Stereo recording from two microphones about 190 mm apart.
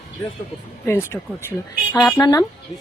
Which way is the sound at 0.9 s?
10° left (ahead or behind).